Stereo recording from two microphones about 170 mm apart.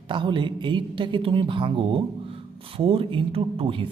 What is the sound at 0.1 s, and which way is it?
A man's voice, 30° right (ahead or behind).